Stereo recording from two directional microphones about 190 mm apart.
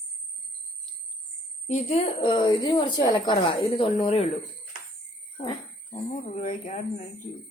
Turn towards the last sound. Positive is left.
turn(degrees=40)  # may be behind; listen again after turning